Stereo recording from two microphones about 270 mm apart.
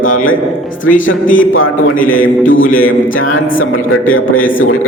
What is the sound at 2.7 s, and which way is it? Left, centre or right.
A man's voice, left.